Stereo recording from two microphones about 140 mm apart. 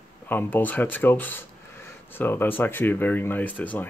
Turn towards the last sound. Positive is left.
turn(degrees=10)  # may be behind; listen again after turning